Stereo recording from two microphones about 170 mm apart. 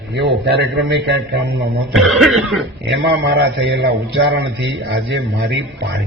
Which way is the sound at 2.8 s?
90° right.